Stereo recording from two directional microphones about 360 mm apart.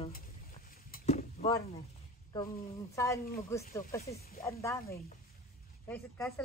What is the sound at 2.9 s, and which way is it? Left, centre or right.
Speech, centre.